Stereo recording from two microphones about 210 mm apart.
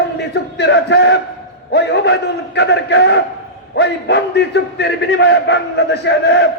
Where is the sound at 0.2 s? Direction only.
55° left (ahead or behind).